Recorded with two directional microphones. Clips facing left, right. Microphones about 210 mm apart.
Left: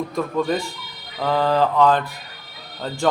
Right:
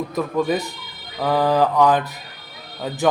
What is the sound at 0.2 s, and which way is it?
Speech, 5° right (ahead or behind).